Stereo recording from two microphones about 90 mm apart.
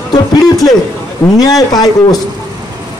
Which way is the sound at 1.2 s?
45° left (ahead or behind).